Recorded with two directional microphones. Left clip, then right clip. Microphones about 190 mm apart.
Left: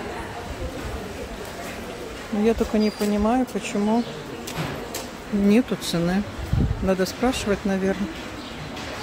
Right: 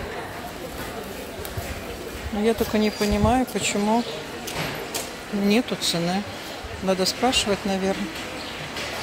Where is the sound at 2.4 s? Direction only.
5° left (ahead or behind).